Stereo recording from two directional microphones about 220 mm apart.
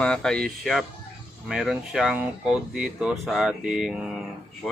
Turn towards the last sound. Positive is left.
turn(degrees=0)  # may be behind; listen again after turning